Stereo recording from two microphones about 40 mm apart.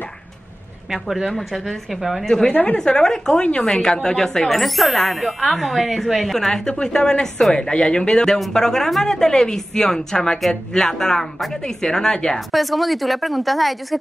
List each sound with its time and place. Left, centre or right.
0.9 s speech: centre
2.2 s a woman's voice: centre
2.5 s a woman's voice: left
2.8 s a woman's voice: centre
4.5 s a woman's voice: centre
12.4 s speech: centre